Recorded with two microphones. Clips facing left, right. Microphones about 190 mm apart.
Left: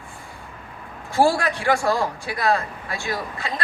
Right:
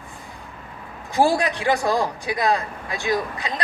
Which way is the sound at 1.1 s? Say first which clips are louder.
Even; 20° right (ahead or behind).